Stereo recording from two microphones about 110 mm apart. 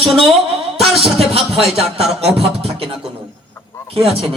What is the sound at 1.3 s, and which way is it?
Music, 65° right (ahead or behind).